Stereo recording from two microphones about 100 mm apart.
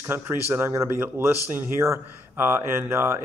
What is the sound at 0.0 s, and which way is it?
A man's voice, 20° right (ahead or behind).